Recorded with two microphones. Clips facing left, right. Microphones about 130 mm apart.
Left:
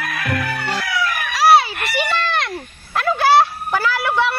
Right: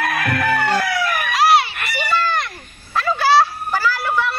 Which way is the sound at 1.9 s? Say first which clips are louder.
Right 1 dB; 80° left.